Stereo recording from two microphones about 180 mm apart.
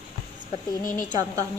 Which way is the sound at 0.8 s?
50° left (ahead or behind).